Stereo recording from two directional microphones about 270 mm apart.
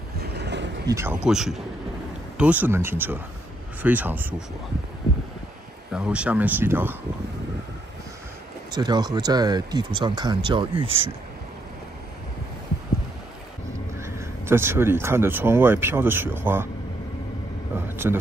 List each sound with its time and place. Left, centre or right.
0.2 s a sound: right
0.8 s speech: centre
5.9 s speech: centre
8.7 s speech: centre
13.9 s speech: centre
17.7 s vehicle: centre